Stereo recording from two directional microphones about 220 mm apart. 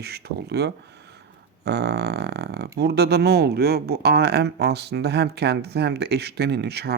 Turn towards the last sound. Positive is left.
turn(degrees=-45)  # may be behind; listen again after turning